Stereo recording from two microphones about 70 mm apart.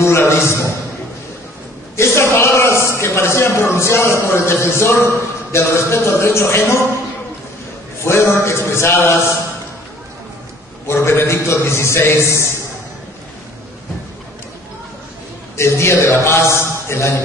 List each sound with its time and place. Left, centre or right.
0.0 s a man's voice: left
2.3 s a sound: left
2.9 s a man's voice: left
8.0 s a man's voice: left
10.9 s a man's voice: left
15.5 s a man's voice: left